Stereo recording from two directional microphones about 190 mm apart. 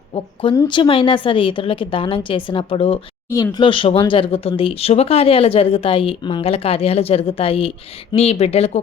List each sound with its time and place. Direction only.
0.5 s speech: 25° left (ahead or behind)